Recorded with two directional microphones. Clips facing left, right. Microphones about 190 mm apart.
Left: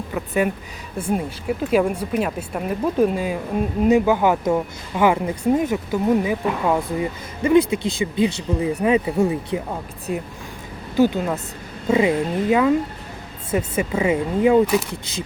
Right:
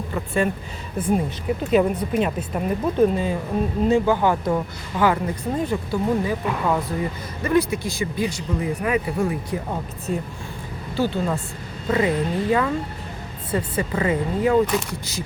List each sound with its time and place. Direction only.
0.1 s speech: 5° left (ahead or behind); by 9.6 s 25° left (ahead or behind)
10.1 s speech: 10° left (ahead or behind)
13.7 s speech: 10° left (ahead or behind)